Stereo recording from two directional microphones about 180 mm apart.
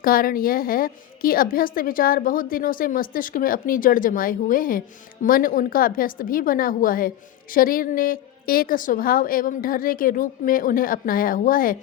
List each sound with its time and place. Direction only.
0.0 s a woman's voice: 55° left (ahead or behind)